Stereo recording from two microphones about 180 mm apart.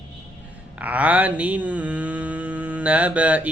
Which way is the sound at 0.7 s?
10° right (ahead or behind).